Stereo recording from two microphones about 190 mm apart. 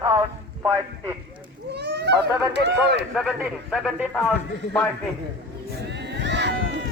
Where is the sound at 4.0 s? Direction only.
5° right (ahead or behind).